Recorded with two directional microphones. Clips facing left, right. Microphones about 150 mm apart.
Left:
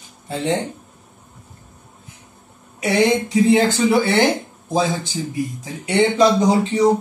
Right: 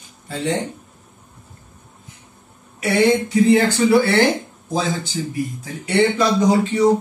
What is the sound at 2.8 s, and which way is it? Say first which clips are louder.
Speech: right 1 dB; 20° left (ahead or behind).